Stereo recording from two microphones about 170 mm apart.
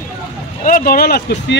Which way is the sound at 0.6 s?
60° left (ahead or behind).